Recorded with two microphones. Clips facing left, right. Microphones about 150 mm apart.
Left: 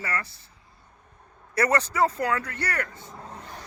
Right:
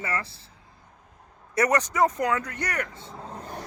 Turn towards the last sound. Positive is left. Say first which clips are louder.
# right 5 dB
turn(degrees=-45)  # may be behind; listen again after turning